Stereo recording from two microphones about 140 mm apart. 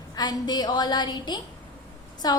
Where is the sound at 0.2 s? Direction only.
30° left (ahead or behind).